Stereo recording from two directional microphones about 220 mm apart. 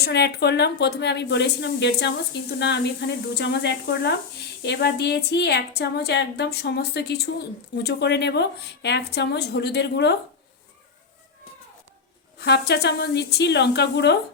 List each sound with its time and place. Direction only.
0.0 s a woman's voice: 50° left (ahead or behind)
12.4 s a woman's voice: 50° left (ahead or behind)